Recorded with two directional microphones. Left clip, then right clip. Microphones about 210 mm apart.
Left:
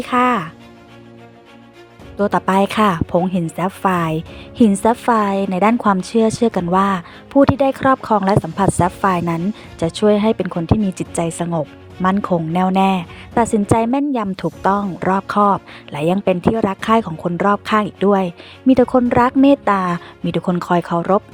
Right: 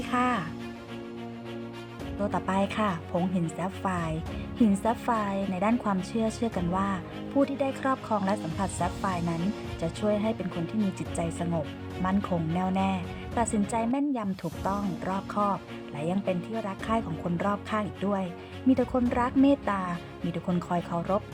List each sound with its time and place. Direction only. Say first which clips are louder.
0.0 s speech: left 12 dB; 45° left (ahead or behind)
2.1 s a woman's voice: left 13 dB; 40° left (ahead or behind)